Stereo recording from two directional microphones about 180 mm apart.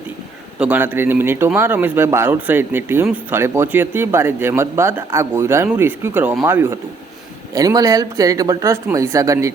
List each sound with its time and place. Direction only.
0.6 s speech: 10° right (ahead or behind)